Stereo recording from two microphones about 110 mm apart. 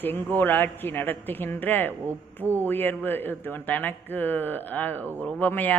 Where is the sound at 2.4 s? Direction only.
20° right (ahead or behind).